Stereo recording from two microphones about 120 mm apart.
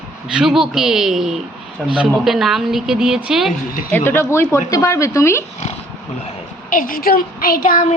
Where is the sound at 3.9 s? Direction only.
20° left (ahead or behind).